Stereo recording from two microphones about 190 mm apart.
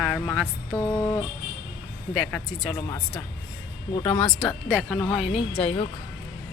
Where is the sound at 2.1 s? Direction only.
Centre (ahead or behind).